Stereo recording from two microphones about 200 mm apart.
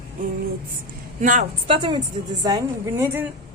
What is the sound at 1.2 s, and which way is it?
Speech, 40° right (ahead or behind).